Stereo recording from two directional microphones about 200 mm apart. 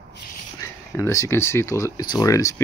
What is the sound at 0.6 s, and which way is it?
Speech, 15° left (ahead or behind).